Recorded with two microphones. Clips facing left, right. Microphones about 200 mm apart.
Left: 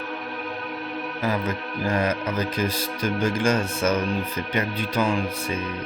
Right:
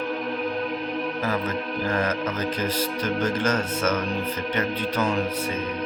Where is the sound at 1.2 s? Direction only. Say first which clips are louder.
Left 4 dB; 15° left (ahead or behind).